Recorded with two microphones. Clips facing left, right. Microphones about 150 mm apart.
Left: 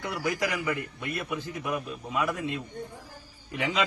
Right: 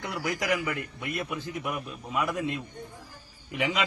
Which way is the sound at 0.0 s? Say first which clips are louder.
Left 2 dB; 20° right (ahead or behind).